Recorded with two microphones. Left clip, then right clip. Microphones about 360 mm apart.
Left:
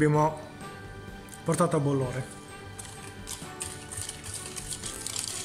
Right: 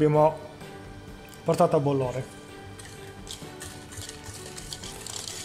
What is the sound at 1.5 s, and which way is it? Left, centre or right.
Speech, centre.